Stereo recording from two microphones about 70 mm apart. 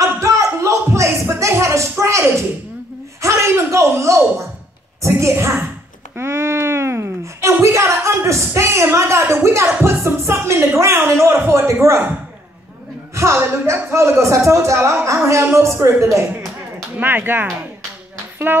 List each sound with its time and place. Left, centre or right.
0.0 s a sound: right
13.1 s speech: right
17.0 s speech: right
18.5 s speech: right